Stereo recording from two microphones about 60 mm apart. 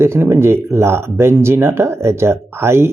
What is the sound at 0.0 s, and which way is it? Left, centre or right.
Speech, right.